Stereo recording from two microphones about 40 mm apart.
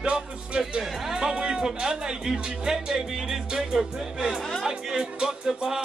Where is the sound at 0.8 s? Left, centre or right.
Centre.